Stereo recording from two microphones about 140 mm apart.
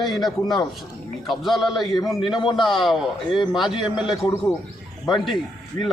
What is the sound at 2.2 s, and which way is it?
Speech, 35° left (ahead or behind).